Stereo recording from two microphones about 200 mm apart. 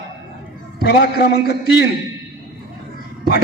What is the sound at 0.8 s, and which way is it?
A man's voice, 55° left (ahead or behind).